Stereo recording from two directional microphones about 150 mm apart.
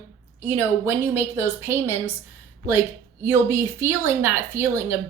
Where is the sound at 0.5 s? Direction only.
15° right (ahead or behind).